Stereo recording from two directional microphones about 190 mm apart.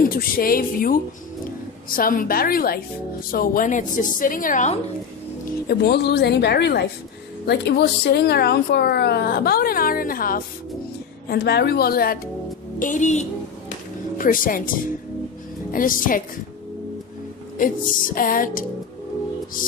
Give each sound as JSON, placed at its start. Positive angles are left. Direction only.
{"t": 0.1, "sound": "a woman's voice", "side_deg": 50}
{"t": 5.7, "sound": "a woman's voice", "side_deg": 60}
{"t": 15.7, "sound": "a woman's voice", "side_deg": 45}
{"t": 17.6, "sound": "a woman's voice", "side_deg": 45}